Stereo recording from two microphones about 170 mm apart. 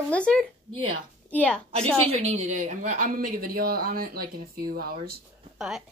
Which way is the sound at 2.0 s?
40° right (ahead or behind).